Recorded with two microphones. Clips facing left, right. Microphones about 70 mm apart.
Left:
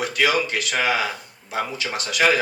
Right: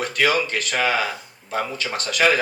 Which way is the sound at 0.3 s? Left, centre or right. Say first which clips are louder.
Right 1 dB; right.